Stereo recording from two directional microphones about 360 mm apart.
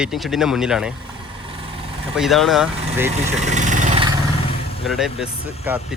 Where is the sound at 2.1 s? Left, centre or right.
Centre.